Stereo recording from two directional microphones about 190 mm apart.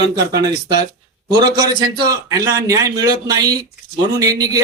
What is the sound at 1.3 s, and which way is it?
Speech, 20° right (ahead or behind).